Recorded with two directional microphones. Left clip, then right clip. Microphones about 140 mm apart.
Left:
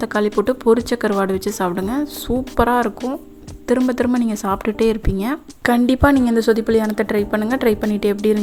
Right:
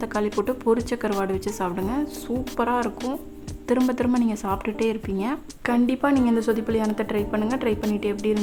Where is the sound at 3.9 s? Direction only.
30° left (ahead or behind).